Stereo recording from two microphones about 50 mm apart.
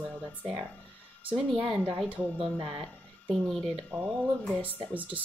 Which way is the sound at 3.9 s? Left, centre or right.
Right.